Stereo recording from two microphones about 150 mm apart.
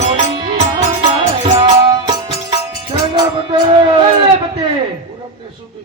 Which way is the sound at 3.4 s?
35° right (ahead or behind).